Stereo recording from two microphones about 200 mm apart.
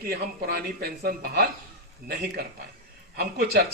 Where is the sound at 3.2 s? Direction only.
55° right (ahead or behind).